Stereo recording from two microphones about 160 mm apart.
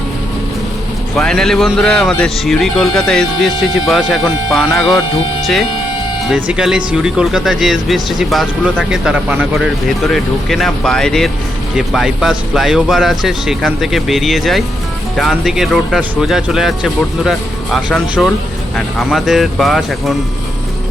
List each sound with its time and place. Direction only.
1.1 s speech: 5° left (ahead or behind)
6.3 s speech: 5° right (ahead or behind)